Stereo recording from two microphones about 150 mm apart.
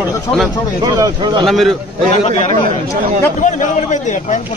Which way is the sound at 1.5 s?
Centre (ahead or behind).